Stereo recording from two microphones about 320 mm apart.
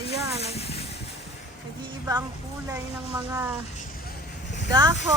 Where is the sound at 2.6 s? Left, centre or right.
Centre.